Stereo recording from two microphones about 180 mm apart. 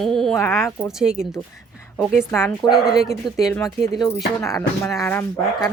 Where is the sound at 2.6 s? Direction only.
Centre (ahead or behind).